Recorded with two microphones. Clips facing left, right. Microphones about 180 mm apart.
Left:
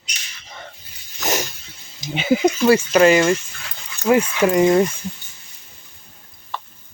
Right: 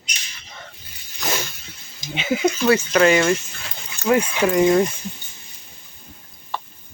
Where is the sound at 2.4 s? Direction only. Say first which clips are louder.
Left 1 dB; 10° left (ahead or behind).